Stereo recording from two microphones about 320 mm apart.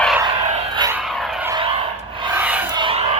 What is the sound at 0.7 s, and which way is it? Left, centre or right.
Vehicle, centre.